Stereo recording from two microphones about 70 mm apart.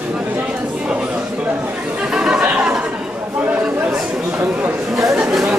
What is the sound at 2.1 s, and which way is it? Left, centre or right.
Chatter, centre.